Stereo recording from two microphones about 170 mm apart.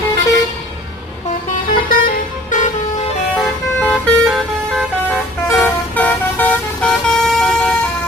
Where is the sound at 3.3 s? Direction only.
5° left (ahead or behind).